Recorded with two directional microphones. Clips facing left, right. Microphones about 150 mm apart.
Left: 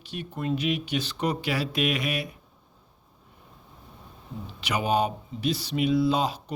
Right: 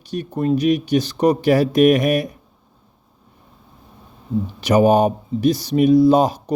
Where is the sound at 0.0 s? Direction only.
40° right (ahead or behind).